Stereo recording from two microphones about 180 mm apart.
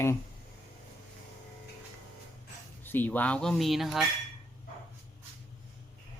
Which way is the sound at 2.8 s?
10° left (ahead or behind).